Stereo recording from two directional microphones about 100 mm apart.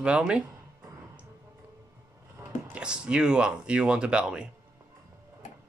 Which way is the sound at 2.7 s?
10° right (ahead or behind).